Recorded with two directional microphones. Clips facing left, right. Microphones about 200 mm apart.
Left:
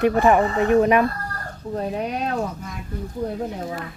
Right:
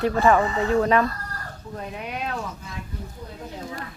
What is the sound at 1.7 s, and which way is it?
Speech, 35° left (ahead or behind).